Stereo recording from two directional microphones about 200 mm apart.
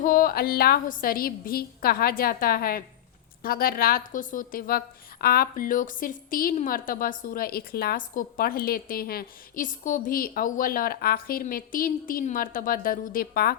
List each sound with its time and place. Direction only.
0.0 s a woman's voice: 45° left (ahead or behind)